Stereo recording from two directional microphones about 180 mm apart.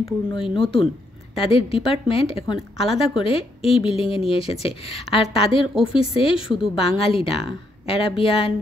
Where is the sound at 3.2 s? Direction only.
30° left (ahead or behind).